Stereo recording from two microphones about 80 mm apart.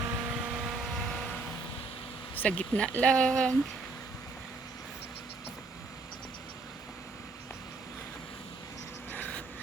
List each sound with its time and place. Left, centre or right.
0.0 s vehicle: right
0.3 s vehicle: centre
2.3 s speech: centre
9.1 s a sound: left